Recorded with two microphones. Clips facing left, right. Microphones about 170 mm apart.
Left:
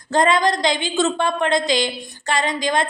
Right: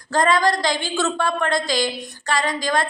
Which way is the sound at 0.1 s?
20° left (ahead or behind).